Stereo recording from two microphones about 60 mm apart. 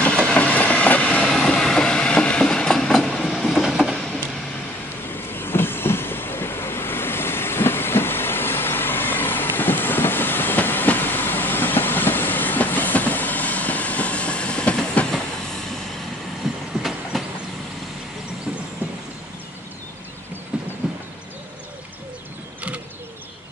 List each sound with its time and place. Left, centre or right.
0.1 s train: centre
0.4 s train: left
1.2 s train: centre
3.6 s a sound: centre
5.3 s train: left; by 14.8 s centre
15.0 s train: centre
16.5 s train: centre
18.8 s train: right
20.5 s train: centre